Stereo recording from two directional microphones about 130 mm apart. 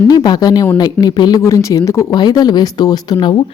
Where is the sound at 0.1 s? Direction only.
30° left (ahead or behind).